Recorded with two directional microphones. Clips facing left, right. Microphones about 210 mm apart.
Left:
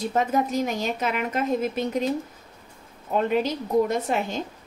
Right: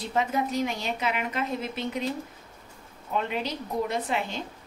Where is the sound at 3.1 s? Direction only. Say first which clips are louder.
Left 7 dB; 45° left (ahead or behind).